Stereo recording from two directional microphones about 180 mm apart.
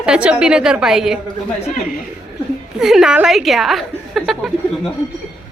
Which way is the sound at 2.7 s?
5° right (ahead or behind).